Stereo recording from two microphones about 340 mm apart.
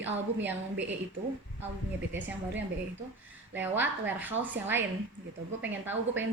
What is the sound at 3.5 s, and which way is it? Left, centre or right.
A woman's voice, centre.